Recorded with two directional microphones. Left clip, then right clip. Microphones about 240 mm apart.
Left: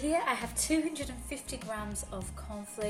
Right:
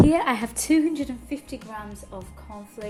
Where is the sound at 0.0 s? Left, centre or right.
Right.